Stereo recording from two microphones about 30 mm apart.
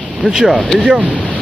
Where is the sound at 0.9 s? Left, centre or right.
Right.